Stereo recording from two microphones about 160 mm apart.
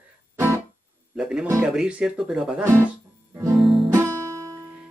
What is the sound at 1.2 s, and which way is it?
Speech, 5° right (ahead or behind).